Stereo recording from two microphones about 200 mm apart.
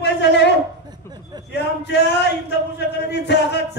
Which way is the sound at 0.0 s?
60° left (ahead or behind).